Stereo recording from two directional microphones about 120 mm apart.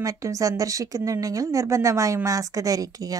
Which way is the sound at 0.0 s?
25° right (ahead or behind).